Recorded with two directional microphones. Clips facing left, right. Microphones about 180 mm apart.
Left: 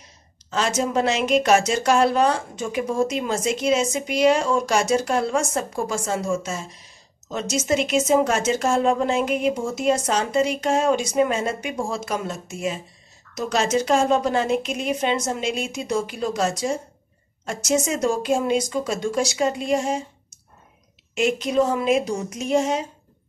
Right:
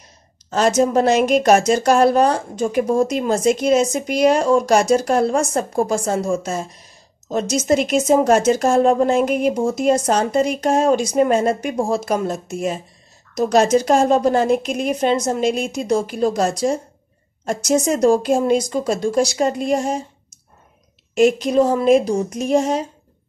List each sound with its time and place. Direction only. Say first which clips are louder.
0.5 s speech: right 7 dB; 40° right (ahead or behind)